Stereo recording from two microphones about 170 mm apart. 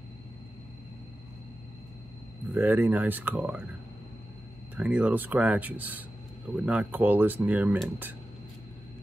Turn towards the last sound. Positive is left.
turn(degrees=-10)  # may be behind; listen again after turning